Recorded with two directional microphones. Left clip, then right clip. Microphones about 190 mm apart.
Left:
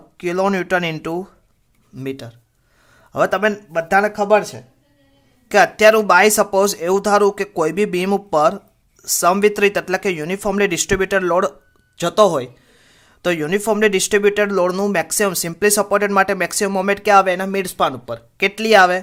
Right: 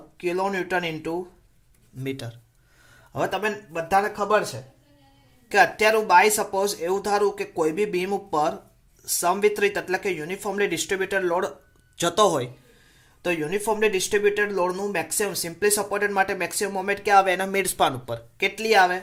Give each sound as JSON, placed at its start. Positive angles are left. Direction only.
{"t": 0.2, "sound": "speech", "side_deg": 40}
{"t": 2.0, "sound": "speech", "side_deg": 25}
{"t": 2.9, "sound": "a sound", "side_deg": 25}
{"t": 3.2, "sound": "speech", "side_deg": 45}
{"t": 5.5, "sound": "speech", "side_deg": 40}
{"t": 11.9, "sound": "speech", "side_deg": 25}
{"t": 13.2, "sound": "speech", "side_deg": 50}
{"t": 18.3, "sound": "speech", "side_deg": 40}